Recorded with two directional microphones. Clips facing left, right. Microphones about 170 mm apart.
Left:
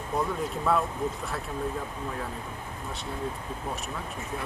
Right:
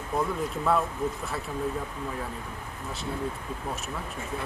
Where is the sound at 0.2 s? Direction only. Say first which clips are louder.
Right 1 dB; centre (ahead or behind).